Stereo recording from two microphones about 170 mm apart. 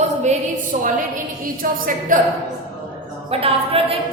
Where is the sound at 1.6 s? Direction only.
55° right (ahead or behind).